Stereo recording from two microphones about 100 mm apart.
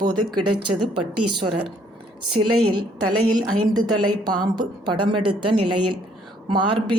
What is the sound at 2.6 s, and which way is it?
A woman's voice, 50° right (ahead or behind).